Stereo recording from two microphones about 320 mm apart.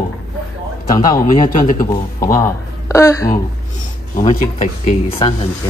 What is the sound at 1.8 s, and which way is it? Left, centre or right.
Speech, centre.